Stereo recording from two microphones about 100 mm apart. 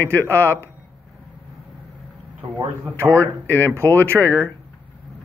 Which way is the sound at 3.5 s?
20° left (ahead or behind).